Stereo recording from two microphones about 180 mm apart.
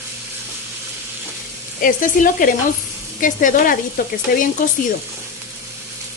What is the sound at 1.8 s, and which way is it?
Frying, 50° left (ahead or behind).